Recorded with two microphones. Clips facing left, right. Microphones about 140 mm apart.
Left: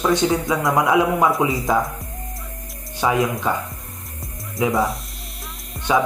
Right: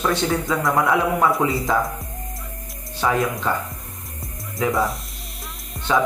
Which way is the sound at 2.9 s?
15° left (ahead or behind).